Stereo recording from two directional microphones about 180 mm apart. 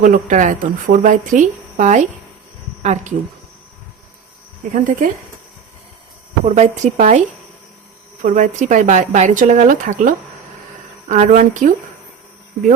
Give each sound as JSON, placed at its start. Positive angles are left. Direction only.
{"t": 0.0, "sound": "a woman's voice", "side_deg": -45}
{"t": 4.7, "sound": "speech", "side_deg": -45}
{"t": 6.4, "sound": "a woman's voice", "side_deg": -40}
{"t": 8.2, "sound": "speech", "side_deg": -45}